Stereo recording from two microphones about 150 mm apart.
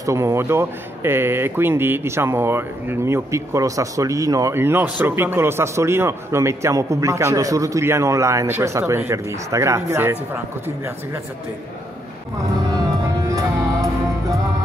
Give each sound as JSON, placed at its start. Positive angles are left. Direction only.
{"t": 0.0, "sound": "speech", "side_deg": -20}
{"t": 13.3, "sound": "music", "side_deg": -20}